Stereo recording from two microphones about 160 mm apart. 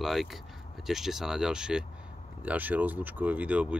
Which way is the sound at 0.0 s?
Centre (ahead or behind).